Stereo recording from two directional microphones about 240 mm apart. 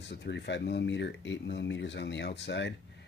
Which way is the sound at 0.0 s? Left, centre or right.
Left.